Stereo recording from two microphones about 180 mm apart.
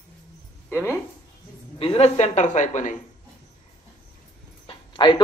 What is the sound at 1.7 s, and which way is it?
A woman's voice, 35° left (ahead or behind).